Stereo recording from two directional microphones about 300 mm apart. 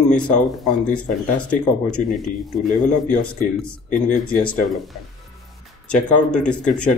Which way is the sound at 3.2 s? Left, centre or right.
Centre.